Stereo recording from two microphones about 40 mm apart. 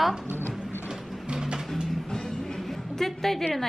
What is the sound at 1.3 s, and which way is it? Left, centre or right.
Music, centre.